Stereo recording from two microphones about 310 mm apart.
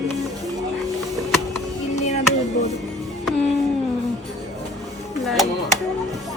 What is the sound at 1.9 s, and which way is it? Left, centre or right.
Music, left.